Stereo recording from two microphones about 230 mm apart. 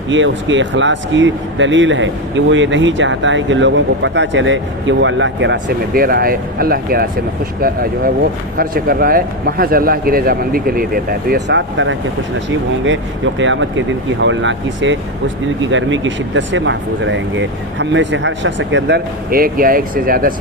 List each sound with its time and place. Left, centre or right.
0.1 s speech: right